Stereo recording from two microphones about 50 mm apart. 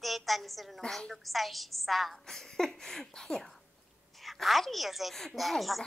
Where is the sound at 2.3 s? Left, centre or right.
Centre.